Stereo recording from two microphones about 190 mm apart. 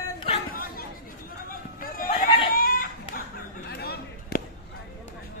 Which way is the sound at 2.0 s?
30° left (ahead or behind).